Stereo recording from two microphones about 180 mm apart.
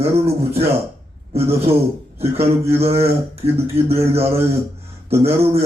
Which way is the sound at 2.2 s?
35° right (ahead or behind).